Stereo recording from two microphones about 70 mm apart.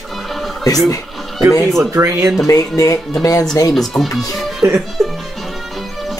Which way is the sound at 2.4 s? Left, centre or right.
Left.